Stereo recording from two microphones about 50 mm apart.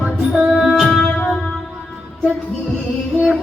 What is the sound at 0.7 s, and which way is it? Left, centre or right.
Music, centre.